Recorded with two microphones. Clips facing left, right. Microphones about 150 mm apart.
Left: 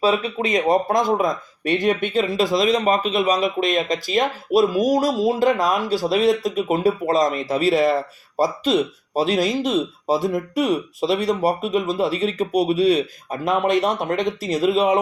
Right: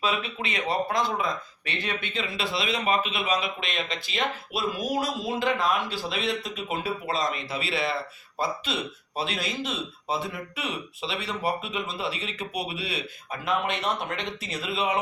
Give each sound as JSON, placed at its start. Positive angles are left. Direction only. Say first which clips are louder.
{"t": 0.0, "sound": "speech", "louder": "left 9 dB", "side_deg": 40}